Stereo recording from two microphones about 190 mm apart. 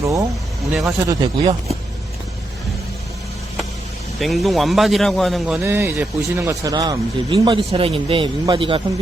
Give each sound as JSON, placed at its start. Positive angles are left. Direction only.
{"t": 0.0, "sound": "speech", "side_deg": -15}
{"t": 4.2, "sound": "a man's voice", "side_deg": 0}
{"t": 5.5, "sound": "speech", "side_deg": -10}